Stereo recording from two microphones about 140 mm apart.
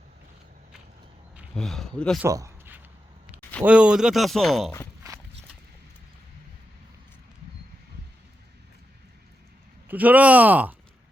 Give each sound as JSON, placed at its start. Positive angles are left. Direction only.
{"t": 1.5, "sound": "speech", "side_deg": 5}
{"t": 2.2, "sound": "a sound", "side_deg": -20}
{"t": 3.6, "sound": "speech", "side_deg": -10}
{"t": 5.0, "sound": "walk", "side_deg": -25}
{"t": 9.9, "sound": "speech", "side_deg": -10}